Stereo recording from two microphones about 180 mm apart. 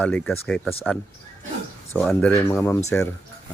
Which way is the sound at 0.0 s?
5° left (ahead or behind).